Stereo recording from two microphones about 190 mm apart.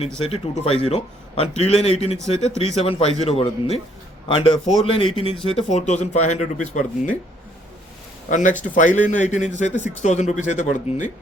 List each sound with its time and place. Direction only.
0.3 s a man's voice: 30° left (ahead or behind)
8.3 s speech: 40° left (ahead or behind)
9.7 s speech: 10° left (ahead or behind)
10.0 s speech: 40° left (ahead or behind)